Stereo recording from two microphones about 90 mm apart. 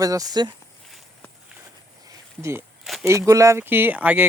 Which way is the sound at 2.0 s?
30° right (ahead or behind).